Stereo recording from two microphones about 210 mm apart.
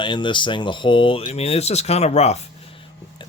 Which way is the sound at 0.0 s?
20° left (ahead or behind).